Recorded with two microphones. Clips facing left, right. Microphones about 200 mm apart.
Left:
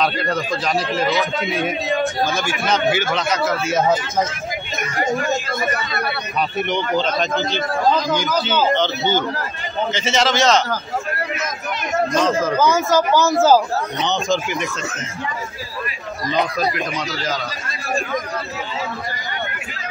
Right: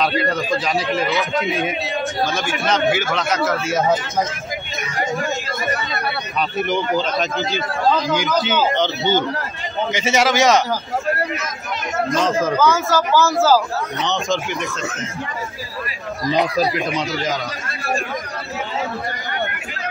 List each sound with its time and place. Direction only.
0.0 s a man's voice: centre (ahead or behind)
6.6 s a man's voice: 5° right (ahead or behind)
8.2 s speech: 15° right (ahead or behind)
12.5 s speech: 15° left (ahead or behind)
14.0 s a man's voice: centre (ahead or behind)
16.9 s speech: 20° right (ahead or behind)